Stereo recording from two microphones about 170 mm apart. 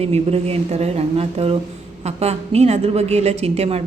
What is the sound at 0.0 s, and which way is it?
A woman's voice, 40° right (ahead or behind).